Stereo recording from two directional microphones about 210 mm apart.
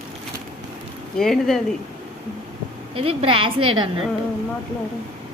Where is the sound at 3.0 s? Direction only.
25° right (ahead or behind).